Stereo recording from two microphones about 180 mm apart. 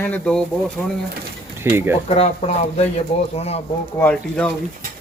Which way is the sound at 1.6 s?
15° right (ahead or behind).